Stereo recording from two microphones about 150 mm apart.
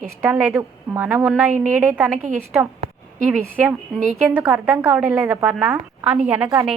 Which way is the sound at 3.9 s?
50° right (ahead or behind).